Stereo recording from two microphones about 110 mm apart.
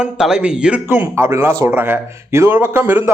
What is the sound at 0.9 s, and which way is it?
A man's voice, 25° right (ahead or behind).